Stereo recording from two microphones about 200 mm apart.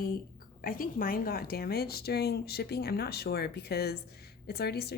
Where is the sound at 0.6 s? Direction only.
45° left (ahead or behind).